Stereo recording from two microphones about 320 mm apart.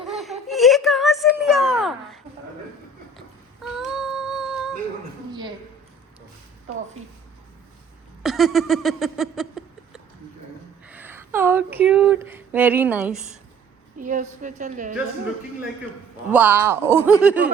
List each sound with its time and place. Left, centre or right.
0.0 s whimper: centre
3.2 s a sound: centre
8.2 s a sound: centre
10.8 s speech: centre
14.0 s a woman's voice: right
16.3 s speech: centre